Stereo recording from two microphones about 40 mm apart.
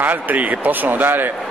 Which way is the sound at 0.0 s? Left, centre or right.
Right.